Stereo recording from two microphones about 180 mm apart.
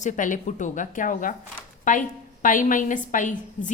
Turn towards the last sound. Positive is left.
turn(degrees=45)  # may be behind; listen again after turning